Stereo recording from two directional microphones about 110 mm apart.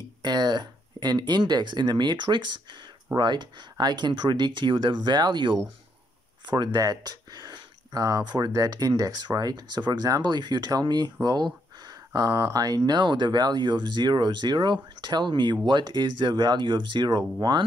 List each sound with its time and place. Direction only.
0.2 s speech: 40° right (ahead or behind)
6.5 s speech: 40° right (ahead or behind)